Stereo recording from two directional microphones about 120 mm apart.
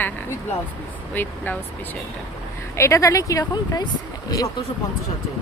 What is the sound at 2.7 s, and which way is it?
Speech, 25° left (ahead or behind).